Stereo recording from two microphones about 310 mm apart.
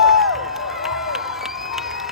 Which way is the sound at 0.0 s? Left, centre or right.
Centre.